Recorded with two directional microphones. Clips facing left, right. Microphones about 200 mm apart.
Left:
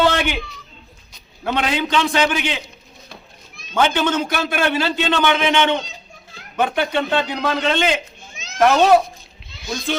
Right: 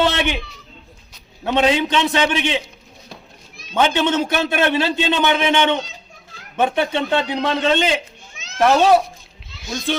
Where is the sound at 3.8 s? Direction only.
20° right (ahead or behind).